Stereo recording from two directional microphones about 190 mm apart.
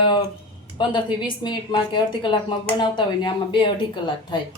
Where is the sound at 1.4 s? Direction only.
25° left (ahead or behind).